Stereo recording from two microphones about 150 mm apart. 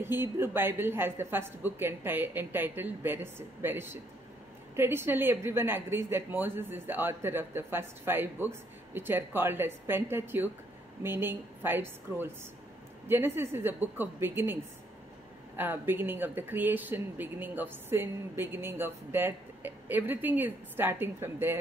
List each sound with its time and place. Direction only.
0.0 s speech: 15° right (ahead or behind)